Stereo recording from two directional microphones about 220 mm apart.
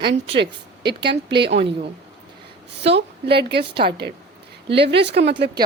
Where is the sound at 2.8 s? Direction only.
50° right (ahead or behind).